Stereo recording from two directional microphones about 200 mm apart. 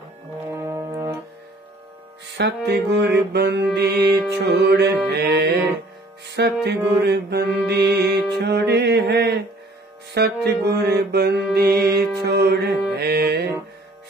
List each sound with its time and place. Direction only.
0.6 s brass instrument: 15° right (ahead or behind)
2.3 s mantra: 55° right (ahead or behind)
10.1 s music: 55° right (ahead or behind)
13.0 s mantra: 55° right (ahead or behind)